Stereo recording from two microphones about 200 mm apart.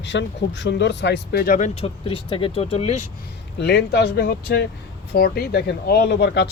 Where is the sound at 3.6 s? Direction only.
60° left (ahead or behind).